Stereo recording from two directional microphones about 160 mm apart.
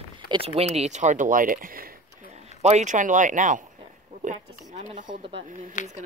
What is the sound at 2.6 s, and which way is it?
Speech, 45° right (ahead or behind).